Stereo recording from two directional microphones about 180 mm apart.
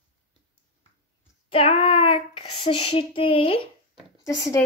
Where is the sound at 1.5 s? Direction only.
30° left (ahead or behind).